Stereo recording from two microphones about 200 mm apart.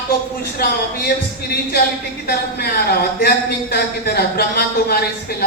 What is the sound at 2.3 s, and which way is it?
Speech, 50° left (ahead or behind).